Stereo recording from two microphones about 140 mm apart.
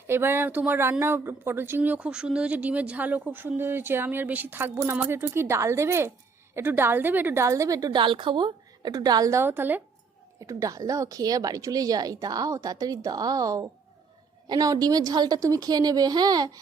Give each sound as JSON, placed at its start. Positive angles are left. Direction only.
{"t": 0.1, "sound": "a woman's voice", "side_deg": -15}